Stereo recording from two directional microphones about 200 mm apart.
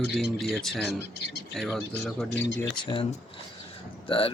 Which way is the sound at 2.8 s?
25° left (ahead or behind).